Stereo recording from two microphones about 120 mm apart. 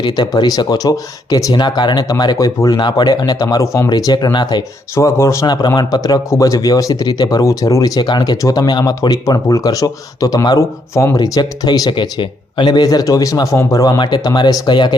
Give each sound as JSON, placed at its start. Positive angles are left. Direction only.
{"t": 0.0, "sound": "a man's voice", "side_deg": 35}
{"t": 4.9, "sound": "a man's voice", "side_deg": 25}